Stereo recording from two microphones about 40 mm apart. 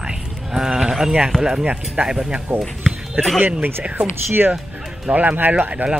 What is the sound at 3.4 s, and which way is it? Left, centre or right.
Speech, right.